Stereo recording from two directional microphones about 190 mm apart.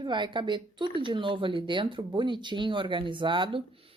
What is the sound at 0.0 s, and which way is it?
Speech, 25° right (ahead or behind).